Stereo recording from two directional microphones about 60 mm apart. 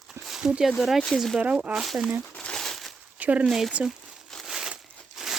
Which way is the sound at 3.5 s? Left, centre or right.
Centre.